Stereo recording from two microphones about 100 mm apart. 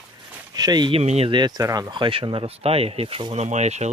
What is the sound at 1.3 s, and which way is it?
Speech, 45° right (ahead or behind).